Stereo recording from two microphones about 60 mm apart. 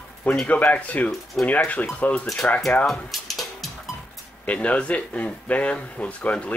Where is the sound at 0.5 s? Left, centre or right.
Left.